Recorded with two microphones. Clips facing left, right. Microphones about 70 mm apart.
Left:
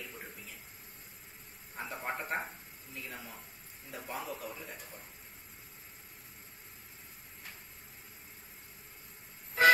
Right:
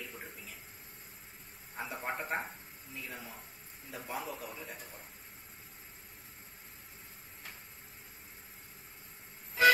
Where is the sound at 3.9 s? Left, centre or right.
Centre.